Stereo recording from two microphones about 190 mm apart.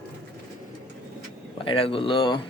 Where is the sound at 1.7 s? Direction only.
30° left (ahead or behind).